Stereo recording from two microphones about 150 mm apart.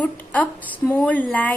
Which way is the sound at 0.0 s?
10° left (ahead or behind).